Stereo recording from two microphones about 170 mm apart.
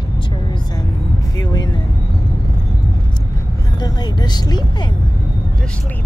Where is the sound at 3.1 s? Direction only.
25° left (ahead or behind).